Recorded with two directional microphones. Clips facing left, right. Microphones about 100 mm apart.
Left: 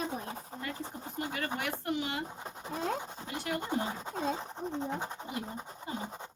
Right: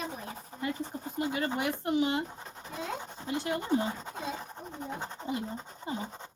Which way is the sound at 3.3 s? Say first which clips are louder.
Right 6 dB; 25° right (ahead or behind).